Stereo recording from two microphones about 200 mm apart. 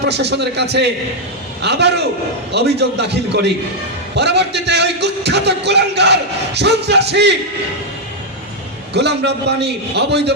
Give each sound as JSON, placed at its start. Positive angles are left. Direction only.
{"t": 0.0, "sound": "a man's voice", "side_deg": -55}
{"t": 8.9, "sound": "a man's voice", "side_deg": -55}